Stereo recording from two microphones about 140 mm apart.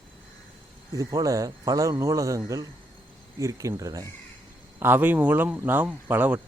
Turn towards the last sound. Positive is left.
turn(degrees=-10)  # may be behind; listen again after turning